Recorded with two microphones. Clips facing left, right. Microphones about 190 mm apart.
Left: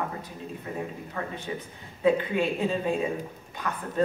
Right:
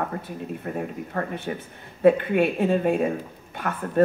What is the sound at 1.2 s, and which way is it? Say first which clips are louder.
Speech: right 6 dB; 45° right (ahead or behind).